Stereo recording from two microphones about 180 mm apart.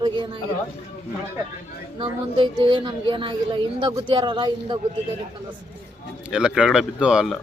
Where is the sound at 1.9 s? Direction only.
30° right (ahead or behind).